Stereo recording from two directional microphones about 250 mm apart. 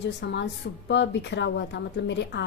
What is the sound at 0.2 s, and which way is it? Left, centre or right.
A woman's voice, left.